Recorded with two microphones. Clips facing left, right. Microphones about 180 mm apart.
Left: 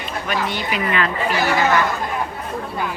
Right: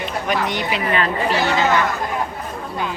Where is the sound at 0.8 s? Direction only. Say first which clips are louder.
Even; 30° right (ahead or behind).